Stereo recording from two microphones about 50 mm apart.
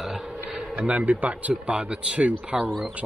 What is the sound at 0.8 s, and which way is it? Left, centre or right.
Speech, right.